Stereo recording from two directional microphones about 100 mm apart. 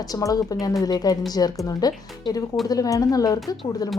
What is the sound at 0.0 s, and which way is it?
A woman's voice, 35° left (ahead or behind).